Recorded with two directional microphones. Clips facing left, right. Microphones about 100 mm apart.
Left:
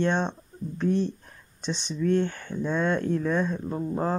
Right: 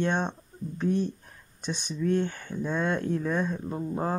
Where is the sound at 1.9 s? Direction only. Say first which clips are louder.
Left 2 dB; 55° left (ahead or behind).